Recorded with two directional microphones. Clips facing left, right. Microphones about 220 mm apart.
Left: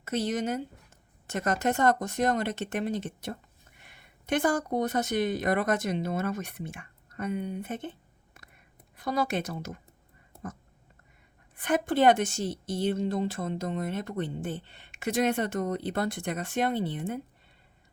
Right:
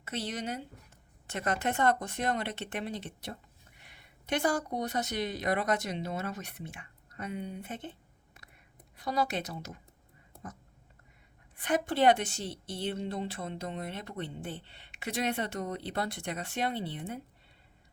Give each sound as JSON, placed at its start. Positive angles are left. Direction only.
{"t": 0.0, "sound": "a woman's voice", "side_deg": 45}
{"t": 9.0, "sound": "a woman's voice", "side_deg": 50}
{"t": 11.5, "sound": "a woman's voice", "side_deg": 50}